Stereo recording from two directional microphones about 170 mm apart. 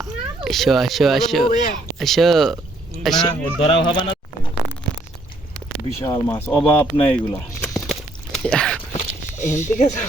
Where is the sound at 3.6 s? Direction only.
30° left (ahead or behind).